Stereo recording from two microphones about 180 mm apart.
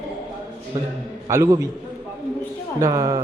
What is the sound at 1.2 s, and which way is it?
Speech, 15° right (ahead or behind).